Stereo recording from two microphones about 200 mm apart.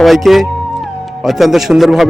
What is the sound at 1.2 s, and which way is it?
Speech, centre (ahead or behind).